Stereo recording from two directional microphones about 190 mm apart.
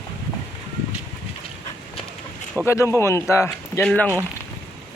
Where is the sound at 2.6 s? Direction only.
15° left (ahead or behind).